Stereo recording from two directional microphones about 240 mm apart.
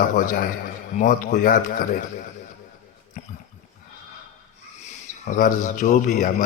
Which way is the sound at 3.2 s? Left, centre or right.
Left.